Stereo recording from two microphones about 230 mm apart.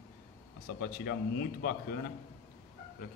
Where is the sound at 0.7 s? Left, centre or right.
Left.